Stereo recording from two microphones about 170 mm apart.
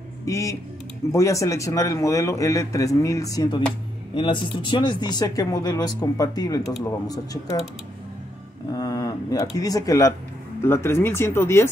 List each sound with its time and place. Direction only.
0.2 s speech: 20° left (ahead or behind)
8.7 s speech: 20° left (ahead or behind)